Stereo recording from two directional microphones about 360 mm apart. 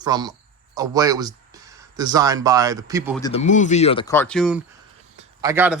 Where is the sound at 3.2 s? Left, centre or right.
Centre.